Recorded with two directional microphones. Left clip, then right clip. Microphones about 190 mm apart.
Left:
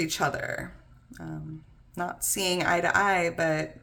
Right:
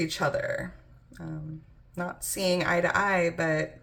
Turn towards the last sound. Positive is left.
turn(degrees=25)  # may be behind; listen again after turning